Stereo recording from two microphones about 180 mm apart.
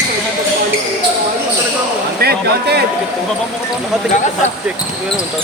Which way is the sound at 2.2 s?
65° right (ahead or behind).